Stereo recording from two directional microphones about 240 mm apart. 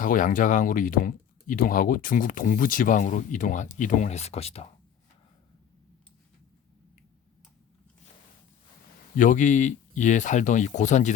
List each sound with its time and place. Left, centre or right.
0.0 s speech: left
9.1 s speech: left